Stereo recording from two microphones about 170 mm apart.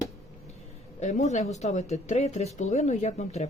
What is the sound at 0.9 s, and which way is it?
Speech, 45° left (ahead or behind).